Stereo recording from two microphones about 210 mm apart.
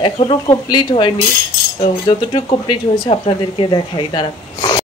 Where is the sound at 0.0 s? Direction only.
25° left (ahead or behind).